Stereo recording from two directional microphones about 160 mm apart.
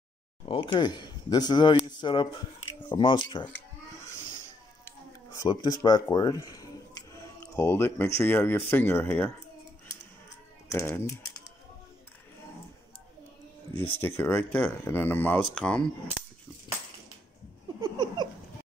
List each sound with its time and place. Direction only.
0.5 s speech: 30° left (ahead or behind)
3.4 s a sound: 15° left (ahead or behind)
8.2 s speech: 15° left (ahead or behind)
10.7 s speech: 20° left (ahead or behind)
13.7 s speech: 15° left (ahead or behind)
17.7 s a sound: 30° right (ahead or behind)